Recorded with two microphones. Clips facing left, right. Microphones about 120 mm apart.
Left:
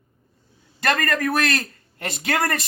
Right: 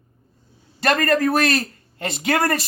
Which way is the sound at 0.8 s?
30° right (ahead or behind).